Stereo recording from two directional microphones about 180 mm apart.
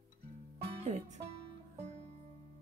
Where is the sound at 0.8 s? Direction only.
40° right (ahead or behind).